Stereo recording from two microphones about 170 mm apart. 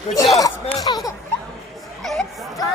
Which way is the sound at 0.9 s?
30° left (ahead or behind).